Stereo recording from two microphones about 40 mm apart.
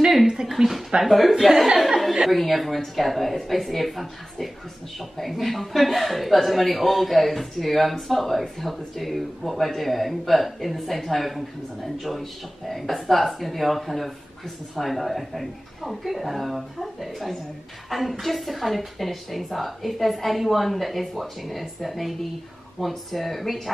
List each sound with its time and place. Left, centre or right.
0.6 s speech: right
1.0 s speech: centre